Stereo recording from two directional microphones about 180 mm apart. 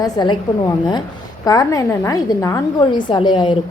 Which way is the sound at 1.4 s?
20° left (ahead or behind).